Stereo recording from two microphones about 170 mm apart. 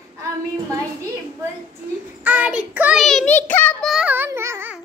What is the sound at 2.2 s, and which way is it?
Child singing, 10° right (ahead or behind).